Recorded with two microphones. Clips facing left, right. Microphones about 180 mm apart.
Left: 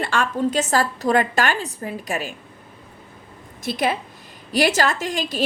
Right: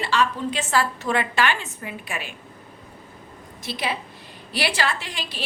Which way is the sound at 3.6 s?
50° left (ahead or behind).